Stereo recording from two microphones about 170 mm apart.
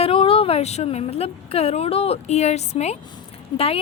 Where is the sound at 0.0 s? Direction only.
35° left (ahead or behind).